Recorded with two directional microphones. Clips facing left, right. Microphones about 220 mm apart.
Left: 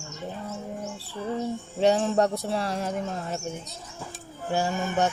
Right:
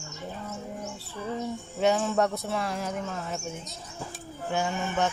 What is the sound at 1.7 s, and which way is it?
Speech, 30° left (ahead or behind).